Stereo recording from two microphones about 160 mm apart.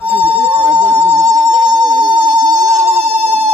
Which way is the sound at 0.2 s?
35° right (ahead or behind).